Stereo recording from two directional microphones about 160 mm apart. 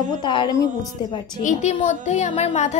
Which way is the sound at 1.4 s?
50° left (ahead or behind).